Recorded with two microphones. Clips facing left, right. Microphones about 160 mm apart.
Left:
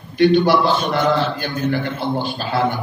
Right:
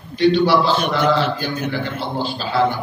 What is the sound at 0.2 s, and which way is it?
A man's voice, 55° left (ahead or behind).